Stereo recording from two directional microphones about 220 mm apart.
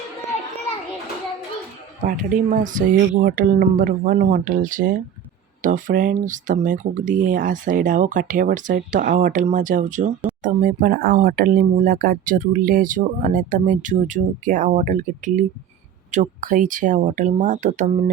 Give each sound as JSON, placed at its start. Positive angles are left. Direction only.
{"t": 2.0, "sound": "speech", "side_deg": -35}